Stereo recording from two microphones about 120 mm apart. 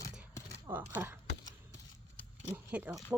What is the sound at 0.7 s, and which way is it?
Speech, 15° right (ahead or behind).